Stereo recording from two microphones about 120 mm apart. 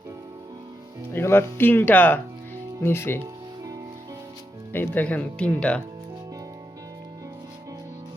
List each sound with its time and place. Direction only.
1.1 s speech: 20° left (ahead or behind)
3.2 s music: 30° right (ahead or behind)
4.7 s speech: 15° left (ahead or behind)